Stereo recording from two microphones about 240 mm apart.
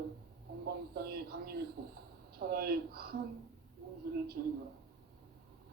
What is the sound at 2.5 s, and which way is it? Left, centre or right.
Speech, right.